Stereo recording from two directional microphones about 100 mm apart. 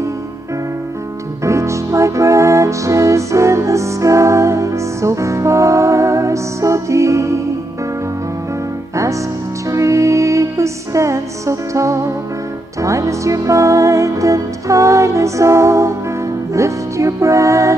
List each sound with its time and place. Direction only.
1.4 s music: 30° right (ahead or behind)
9.7 s music: 30° right (ahead or behind)